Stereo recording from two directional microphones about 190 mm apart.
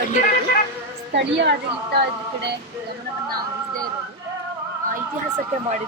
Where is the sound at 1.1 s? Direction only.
70° right (ahead or behind).